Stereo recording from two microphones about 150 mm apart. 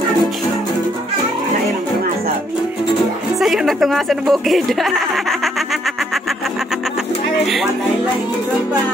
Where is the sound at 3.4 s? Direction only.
Centre (ahead or behind).